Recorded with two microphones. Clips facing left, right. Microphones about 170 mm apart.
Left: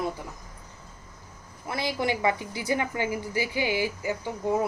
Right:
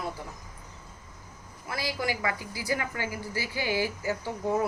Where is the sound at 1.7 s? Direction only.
25° left (ahead or behind).